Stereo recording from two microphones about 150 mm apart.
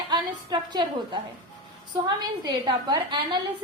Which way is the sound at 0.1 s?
30° right (ahead or behind).